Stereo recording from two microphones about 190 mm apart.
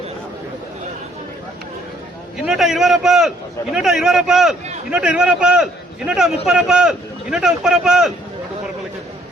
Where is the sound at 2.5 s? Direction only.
Centre (ahead or behind).